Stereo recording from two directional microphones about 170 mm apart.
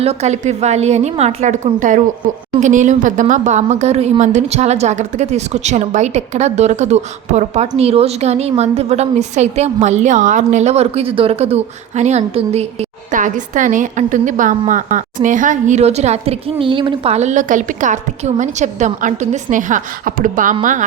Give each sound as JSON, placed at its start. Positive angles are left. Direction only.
{"t": 0.0, "sound": "a woman's voice", "side_deg": -40}